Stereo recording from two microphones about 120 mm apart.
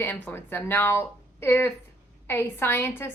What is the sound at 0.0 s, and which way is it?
A woman's voice, 15° left (ahead or behind).